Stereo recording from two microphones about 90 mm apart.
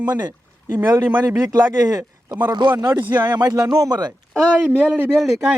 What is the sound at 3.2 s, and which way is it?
Speech, 50° right (ahead or behind).